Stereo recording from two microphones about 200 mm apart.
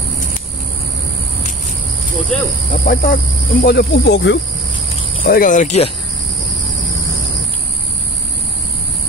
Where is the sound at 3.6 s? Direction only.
55° left (ahead or behind).